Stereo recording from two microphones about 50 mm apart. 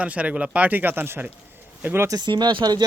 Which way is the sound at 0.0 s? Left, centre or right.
Right.